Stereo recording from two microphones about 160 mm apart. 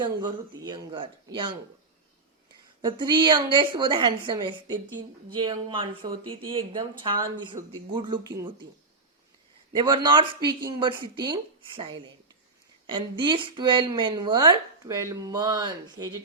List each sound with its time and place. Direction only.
0.0 s a woman's voice: 25° right (ahead or behind)
2.8 s a woman's voice: 30° right (ahead or behind)
9.7 s a woman's voice: 30° right (ahead or behind)